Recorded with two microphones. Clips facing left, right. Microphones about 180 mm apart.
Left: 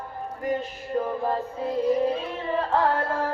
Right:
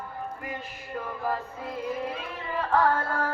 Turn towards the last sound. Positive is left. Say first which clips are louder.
# left 1 dB
turn(degrees=25)  # may be behind; listen again after turning